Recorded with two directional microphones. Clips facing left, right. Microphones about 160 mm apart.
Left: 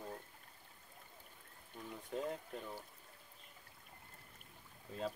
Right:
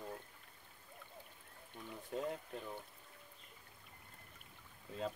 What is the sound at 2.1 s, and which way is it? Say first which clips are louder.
Speech: even; centre (ahead or behind).